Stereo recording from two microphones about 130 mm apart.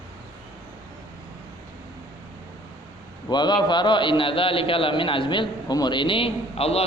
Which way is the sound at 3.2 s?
35° left (ahead or behind).